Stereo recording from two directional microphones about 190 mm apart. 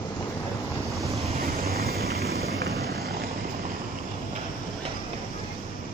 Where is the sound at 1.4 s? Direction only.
50° right (ahead or behind).